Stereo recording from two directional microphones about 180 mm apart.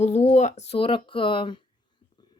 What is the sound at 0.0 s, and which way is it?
Speech, 35° left (ahead or behind).